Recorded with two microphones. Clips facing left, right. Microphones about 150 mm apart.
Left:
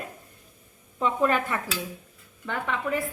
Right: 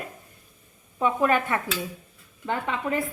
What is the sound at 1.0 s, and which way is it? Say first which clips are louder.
Speech: right 2 dB; 10° right (ahead or behind).